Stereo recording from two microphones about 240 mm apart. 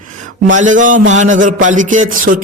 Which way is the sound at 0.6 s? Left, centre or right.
Right.